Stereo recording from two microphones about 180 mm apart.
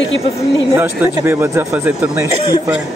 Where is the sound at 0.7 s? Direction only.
10° right (ahead or behind).